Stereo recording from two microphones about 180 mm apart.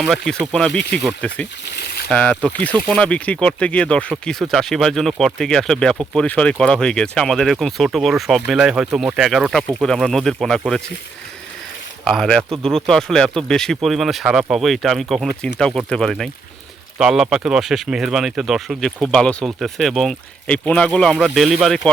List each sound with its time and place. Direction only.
0.0 s speech: centre (ahead or behind)
1.6 s a sound: 60° left (ahead or behind)
2.0 s speech: 5° left (ahead or behind)
12.0 s speech: centre (ahead or behind)